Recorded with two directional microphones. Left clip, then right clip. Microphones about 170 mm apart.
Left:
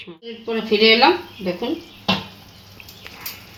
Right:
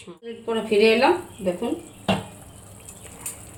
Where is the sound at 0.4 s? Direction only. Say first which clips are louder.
Left 3 dB; 55° left (ahead or behind).